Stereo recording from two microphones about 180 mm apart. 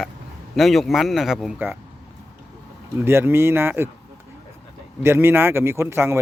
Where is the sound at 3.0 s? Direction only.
15° right (ahead or behind).